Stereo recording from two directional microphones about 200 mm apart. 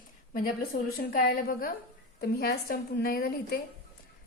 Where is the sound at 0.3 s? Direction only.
45° left (ahead or behind).